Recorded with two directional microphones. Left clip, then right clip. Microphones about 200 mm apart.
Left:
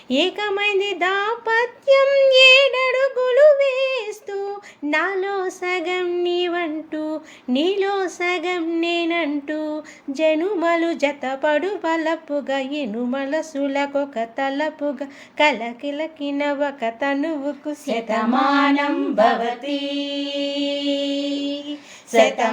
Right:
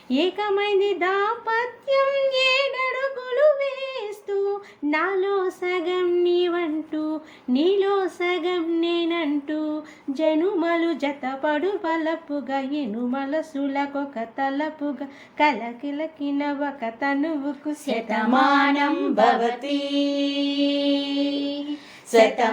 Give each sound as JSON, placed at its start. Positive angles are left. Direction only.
{"t": 0.1, "sound": "speech", "side_deg": 35}
{"t": 17.8, "sound": "mantra", "side_deg": 0}